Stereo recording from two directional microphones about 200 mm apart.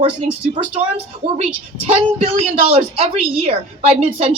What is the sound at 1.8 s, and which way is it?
A woman's voice, 30° right (ahead or behind).